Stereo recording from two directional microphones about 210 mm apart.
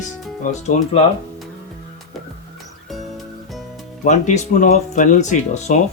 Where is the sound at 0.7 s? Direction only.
35° left (ahead or behind).